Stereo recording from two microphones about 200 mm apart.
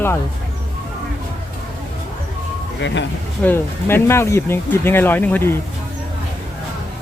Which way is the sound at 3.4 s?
10° left (ahead or behind).